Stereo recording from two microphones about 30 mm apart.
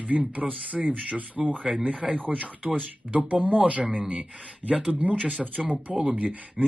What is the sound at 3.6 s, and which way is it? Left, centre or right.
Speech, right.